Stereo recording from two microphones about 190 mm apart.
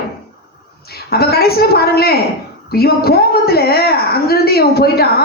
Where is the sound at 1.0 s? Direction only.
55° left (ahead or behind).